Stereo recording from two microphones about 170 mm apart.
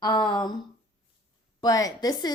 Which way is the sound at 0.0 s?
25° left (ahead or behind).